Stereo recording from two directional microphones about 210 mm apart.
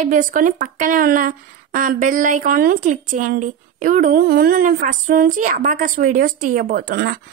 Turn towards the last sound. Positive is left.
turn(degrees=-50)  # may be behind; listen again after turning